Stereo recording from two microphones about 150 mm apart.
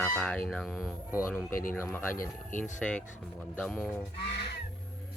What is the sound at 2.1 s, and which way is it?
Speech, 65° left (ahead or behind).